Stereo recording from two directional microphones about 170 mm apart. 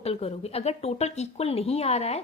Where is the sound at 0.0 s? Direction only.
35° left (ahead or behind).